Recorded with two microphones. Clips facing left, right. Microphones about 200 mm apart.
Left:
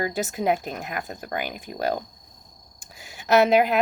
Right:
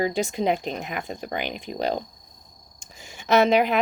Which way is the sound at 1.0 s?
50° left (ahead or behind).